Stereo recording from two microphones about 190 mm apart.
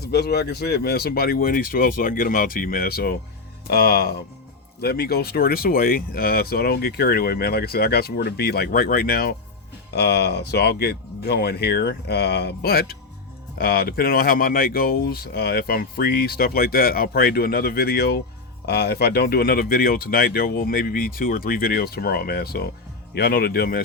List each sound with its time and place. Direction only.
0.0 s speech: 60° left (ahead or behind)